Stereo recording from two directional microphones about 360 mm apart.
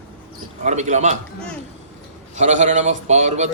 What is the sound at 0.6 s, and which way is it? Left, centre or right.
Music, centre.